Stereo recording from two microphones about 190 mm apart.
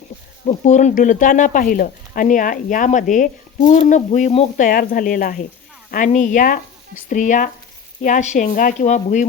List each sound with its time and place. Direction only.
0.4 s speech: 40° left (ahead or behind)